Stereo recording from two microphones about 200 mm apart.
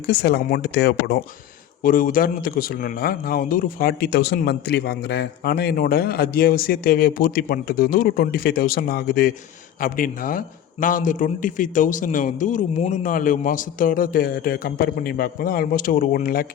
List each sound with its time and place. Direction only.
0.1 s a man's voice: 55° left (ahead or behind)
1.8 s a man's voice: 45° left (ahead or behind)